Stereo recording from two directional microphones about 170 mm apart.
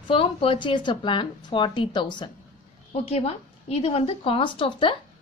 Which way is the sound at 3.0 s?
35° left (ahead or behind).